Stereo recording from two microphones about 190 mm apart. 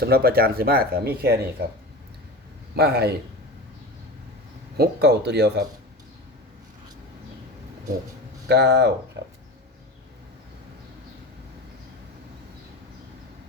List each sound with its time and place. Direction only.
0.0 s speech: 55° right (ahead or behind)
2.7 s speech: 60° right (ahead or behind)
4.8 s speech: 60° right (ahead or behind)
8.4 s speech: 60° right (ahead or behind)